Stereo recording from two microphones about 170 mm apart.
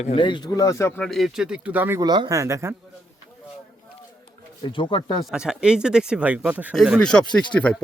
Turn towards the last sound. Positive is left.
turn(degrees=5)  # may be behind; listen again after turning